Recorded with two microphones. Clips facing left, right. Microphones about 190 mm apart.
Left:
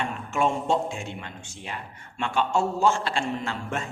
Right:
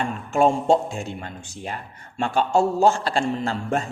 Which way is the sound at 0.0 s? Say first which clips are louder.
Right 6 dB; 35° right (ahead or behind).